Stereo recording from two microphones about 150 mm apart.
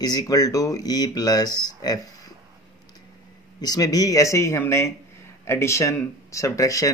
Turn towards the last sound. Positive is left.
turn(degrees=20)  # may be behind; listen again after turning